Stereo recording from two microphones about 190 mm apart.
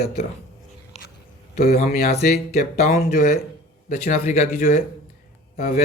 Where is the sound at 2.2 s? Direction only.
35° left (ahead or behind).